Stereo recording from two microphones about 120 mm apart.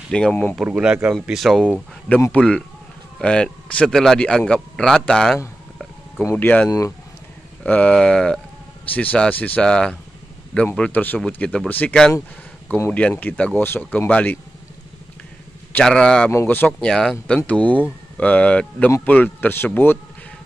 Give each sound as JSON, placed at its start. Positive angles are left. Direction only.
{"t": 0.1, "sound": "speech", "side_deg": 10}
{"t": 0.6, "sound": "a man's voice", "side_deg": -5}
{"t": 2.3, "sound": "a man's voice", "side_deg": 10}
{"t": 15.7, "sound": "speech", "side_deg": 5}